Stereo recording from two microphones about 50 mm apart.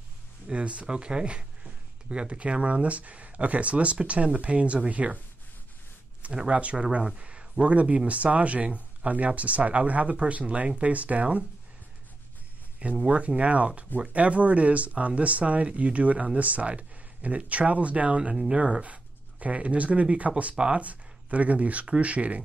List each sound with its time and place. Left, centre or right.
0.5 s speech: right
6.2 s speech: right
13.0 s speech: right
18.3 s speech: centre
18.6 s speech: right